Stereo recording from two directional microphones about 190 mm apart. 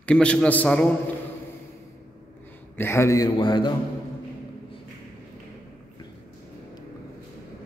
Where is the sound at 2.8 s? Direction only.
15° left (ahead or behind).